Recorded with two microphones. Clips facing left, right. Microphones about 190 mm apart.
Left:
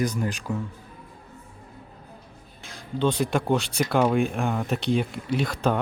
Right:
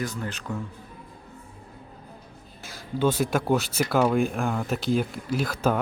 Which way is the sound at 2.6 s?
5° right (ahead or behind).